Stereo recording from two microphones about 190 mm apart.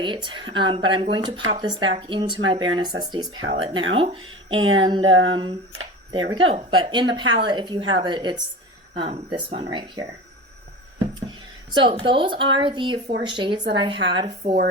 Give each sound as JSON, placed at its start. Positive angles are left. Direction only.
{"t": 0.0, "sound": "a woman's voice", "side_deg": -25}
{"t": 5.1, "sound": "a sound", "side_deg": -90}
{"t": 5.4, "sound": "a woman's voice", "side_deg": -25}
{"t": 11.7, "sound": "a woman's voice", "side_deg": -25}